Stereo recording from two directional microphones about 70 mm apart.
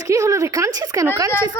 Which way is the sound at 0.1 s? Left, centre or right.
Right.